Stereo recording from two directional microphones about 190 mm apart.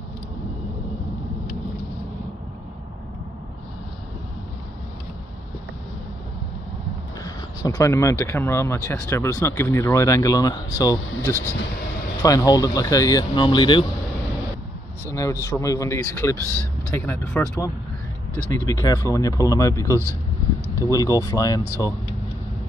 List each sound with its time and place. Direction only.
7.2 s speech: 20° left (ahead or behind)
15.0 s speech: 15° left (ahead or behind)
18.7 s speech: 15° left (ahead or behind)